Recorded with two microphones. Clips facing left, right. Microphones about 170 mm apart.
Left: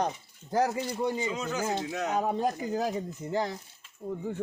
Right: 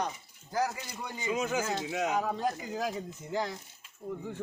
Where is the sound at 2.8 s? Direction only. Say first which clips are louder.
Left 4 dB; 30° left (ahead or behind).